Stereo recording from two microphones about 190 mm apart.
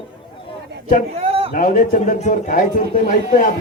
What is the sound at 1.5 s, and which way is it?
A man's voice, 45° left (ahead or behind).